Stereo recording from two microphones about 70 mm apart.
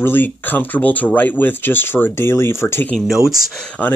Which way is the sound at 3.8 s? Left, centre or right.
Left.